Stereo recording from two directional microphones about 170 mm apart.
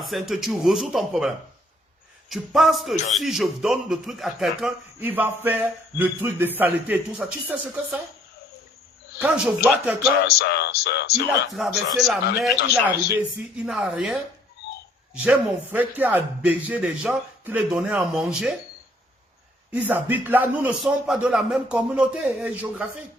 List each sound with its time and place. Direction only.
0.0 s speech: centre (ahead or behind)
2.3 s a man's voice: centre (ahead or behind)
9.1 s a man's voice: 5° right (ahead or behind)
10.3 s speech: 75° left (ahead or behind)
11.5 s speech: centre (ahead or behind)
15.2 s a man's voice: 10° right (ahead or behind)
19.7 s a man's voice: 10° right (ahead or behind)